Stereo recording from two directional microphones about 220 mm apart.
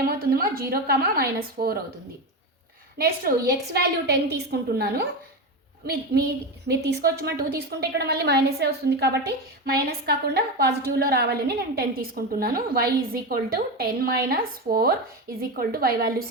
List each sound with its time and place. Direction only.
0.0 s a woman's voice: 45° right (ahead or behind)
3.7 s a woman's voice: 45° right (ahead or behind)